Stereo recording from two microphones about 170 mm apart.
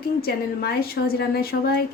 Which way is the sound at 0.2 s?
65° left (ahead or behind).